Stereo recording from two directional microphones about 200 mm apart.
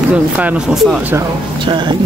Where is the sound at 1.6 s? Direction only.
25° right (ahead or behind).